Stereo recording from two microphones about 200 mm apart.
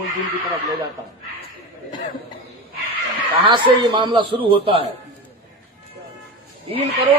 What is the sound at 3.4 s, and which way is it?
A man's voice, 25° right (ahead or behind).